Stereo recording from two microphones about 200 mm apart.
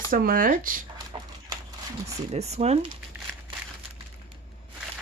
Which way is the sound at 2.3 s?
35° right (ahead or behind).